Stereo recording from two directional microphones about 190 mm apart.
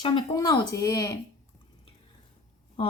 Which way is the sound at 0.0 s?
25° left (ahead or behind).